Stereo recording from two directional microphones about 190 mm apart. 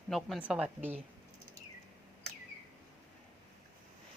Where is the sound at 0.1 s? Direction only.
Centre (ahead or behind).